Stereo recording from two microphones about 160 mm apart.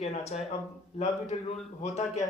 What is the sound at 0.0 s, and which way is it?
A man's voice, 40° left (ahead or behind).